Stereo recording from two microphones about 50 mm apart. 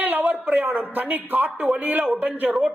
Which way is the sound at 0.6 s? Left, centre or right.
Right.